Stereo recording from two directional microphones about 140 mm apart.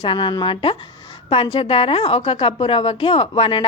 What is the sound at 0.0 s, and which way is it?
A woman's voice, 35° left (ahead or behind).